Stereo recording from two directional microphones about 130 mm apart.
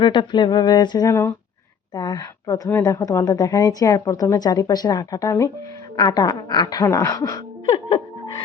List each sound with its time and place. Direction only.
0.0 s speech: 35° left (ahead or behind)
7.9 s music: 40° left (ahead or behind)